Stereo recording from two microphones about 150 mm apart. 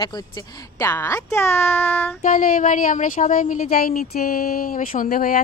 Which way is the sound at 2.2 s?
65° left (ahead or behind).